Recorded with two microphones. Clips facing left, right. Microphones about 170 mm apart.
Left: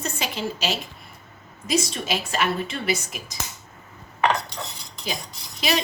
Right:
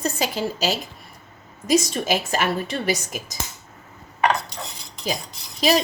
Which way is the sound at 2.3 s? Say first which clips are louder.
Right 2 dB; 40° right (ahead or behind).